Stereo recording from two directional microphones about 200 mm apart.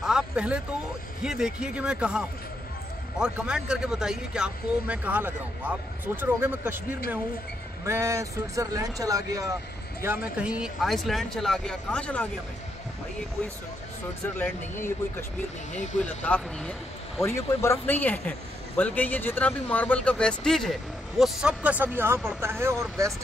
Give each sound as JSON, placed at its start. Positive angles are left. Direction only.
{"t": 0.0, "sound": "a sound", "side_deg": -5}
{"t": 1.2, "sound": "speech", "side_deg": -5}
{"t": 14.4, "sound": "speech", "side_deg": 10}
{"t": 15.7, "sound": "speech", "side_deg": 35}
{"t": 16.3, "sound": "speech", "side_deg": 5}